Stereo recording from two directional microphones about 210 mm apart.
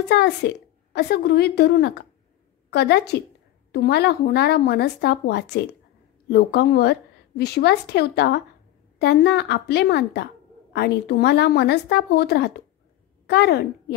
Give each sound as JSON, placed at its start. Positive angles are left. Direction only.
{"t": 0.1, "sound": "a woman's voice", "side_deg": 55}